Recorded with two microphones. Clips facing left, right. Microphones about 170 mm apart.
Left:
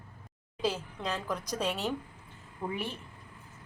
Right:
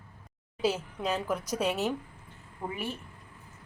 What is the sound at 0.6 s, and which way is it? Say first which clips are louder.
Speech: right 3 dB; 10° right (ahead or behind).